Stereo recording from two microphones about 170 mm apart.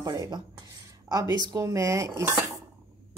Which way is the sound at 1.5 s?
20° right (ahead or behind).